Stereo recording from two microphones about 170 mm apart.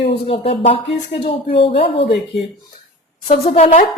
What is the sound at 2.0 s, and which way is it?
Speech, 90° left.